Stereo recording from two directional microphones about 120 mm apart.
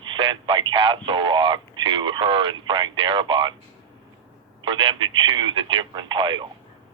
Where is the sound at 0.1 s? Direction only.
45° right (ahead or behind).